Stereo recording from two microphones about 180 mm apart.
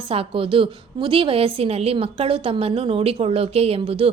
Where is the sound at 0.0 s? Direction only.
30° right (ahead or behind).